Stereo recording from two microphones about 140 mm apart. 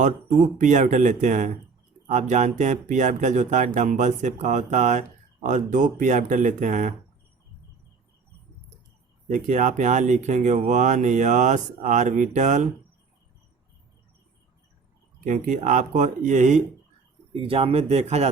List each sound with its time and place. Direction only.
0.6 s speech: 60° right (ahead or behind)
9.2 s speech: 65° right (ahead or behind)
15.2 s speech: 65° right (ahead or behind)
17.3 s speech: 40° right (ahead or behind)